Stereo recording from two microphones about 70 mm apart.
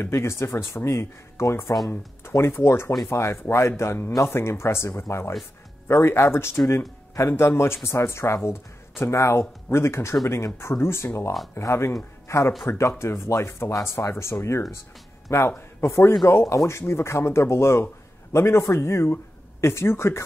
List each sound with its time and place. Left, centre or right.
0.0 s a man's voice: left